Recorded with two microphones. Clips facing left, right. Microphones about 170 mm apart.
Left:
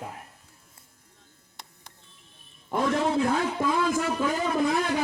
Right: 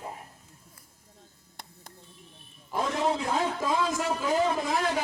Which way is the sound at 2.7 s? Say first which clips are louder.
Left 4 dB; 60° left (ahead or behind).